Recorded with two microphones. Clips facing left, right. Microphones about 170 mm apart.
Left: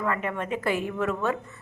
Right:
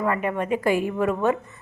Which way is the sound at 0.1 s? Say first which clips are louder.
Right 5 dB; 15° right (ahead or behind).